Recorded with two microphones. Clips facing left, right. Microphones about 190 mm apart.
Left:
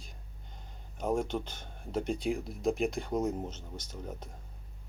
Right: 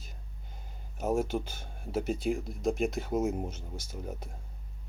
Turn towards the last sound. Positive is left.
turn(degrees=-10)  # may be behind; listen again after turning